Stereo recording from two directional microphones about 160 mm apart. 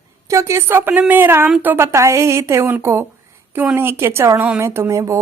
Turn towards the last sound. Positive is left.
turn(degrees=-20)  # may be behind; listen again after turning